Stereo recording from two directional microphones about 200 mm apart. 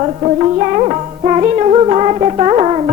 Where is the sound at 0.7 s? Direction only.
25° right (ahead or behind).